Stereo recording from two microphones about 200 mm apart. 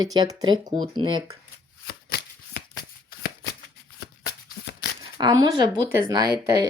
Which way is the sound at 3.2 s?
55° left (ahead or behind).